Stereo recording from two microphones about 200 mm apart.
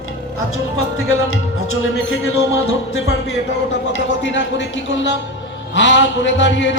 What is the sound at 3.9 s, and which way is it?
Speech, 65° left (ahead or behind).